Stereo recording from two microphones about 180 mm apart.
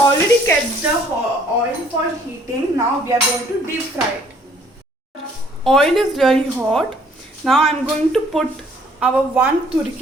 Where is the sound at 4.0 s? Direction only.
10° right (ahead or behind).